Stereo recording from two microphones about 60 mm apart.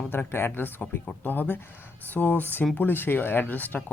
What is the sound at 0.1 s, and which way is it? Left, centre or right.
Speech, left.